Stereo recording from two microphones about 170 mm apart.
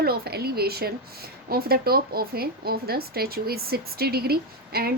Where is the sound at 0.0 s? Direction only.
65° right (ahead or behind).